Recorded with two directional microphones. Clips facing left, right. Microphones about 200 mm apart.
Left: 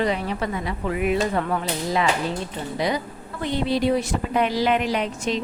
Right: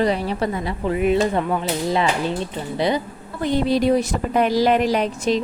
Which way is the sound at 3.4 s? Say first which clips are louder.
Right 4 dB; 45° right (ahead or behind).